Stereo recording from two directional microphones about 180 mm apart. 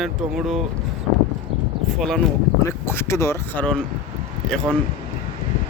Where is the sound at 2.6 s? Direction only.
15° left (ahead or behind).